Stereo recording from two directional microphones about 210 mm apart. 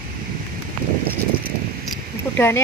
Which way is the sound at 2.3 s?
10° left (ahead or behind).